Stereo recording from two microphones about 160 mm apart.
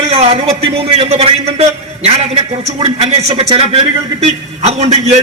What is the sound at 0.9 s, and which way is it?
A man's voice, 40° right (ahead or behind).